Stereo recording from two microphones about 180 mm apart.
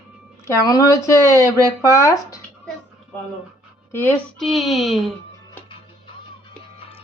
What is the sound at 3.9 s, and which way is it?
Speech, 10° left (ahead or behind).